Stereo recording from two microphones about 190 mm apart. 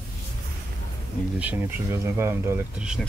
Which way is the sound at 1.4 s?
10° right (ahead or behind).